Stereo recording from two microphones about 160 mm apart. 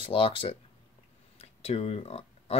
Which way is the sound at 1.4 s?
40° left (ahead or behind).